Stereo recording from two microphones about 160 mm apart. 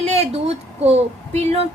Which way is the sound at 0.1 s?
40° right (ahead or behind).